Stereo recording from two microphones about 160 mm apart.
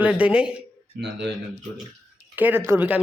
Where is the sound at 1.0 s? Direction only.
90° right.